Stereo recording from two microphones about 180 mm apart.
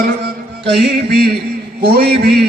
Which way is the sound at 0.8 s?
60° right (ahead or behind).